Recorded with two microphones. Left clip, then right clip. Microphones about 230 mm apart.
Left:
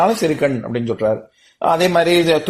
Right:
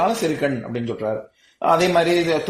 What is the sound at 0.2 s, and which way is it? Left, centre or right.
Speech, left.